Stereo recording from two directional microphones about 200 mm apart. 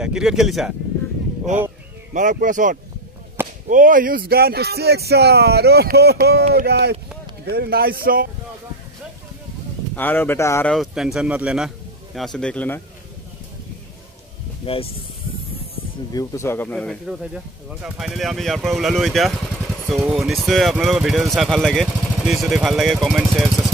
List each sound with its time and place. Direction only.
0.0 s speech: 5° right (ahead or behind)
2.1 s speech: 40° right (ahead or behind)
9.9 s speech: 10° left (ahead or behind)
10.7 s speech: centre (ahead or behind)
14.7 s speech: 30° left (ahead or behind)
16.1 s speech: 15° left (ahead or behind); by 23.7 s centre (ahead or behind)